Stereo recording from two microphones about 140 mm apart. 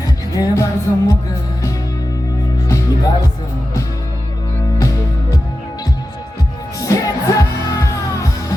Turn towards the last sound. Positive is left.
turn(degrees=25)  # may be behind; listen again after turning